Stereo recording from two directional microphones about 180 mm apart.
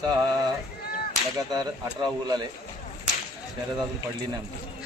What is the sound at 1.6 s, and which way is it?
Speech, 25° right (ahead or behind).